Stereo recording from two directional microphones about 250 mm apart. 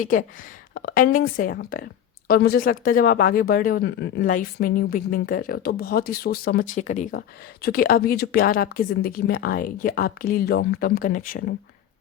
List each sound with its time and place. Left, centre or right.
0.0 s speech: left